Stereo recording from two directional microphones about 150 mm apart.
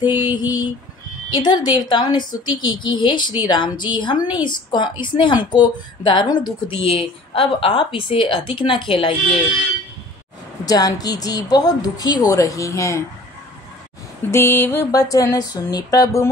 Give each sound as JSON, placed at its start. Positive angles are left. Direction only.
{"t": 0.2, "sound": "a woman's voice", "side_deg": 30}
{"t": 10.6, "sound": "a woman's voice", "side_deg": 25}
{"t": 14.3, "sound": "a woman's voice", "side_deg": 15}